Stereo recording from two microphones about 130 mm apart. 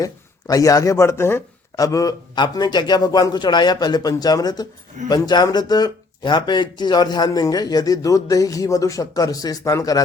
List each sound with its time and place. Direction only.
0.0 s speech: 25° left (ahead or behind)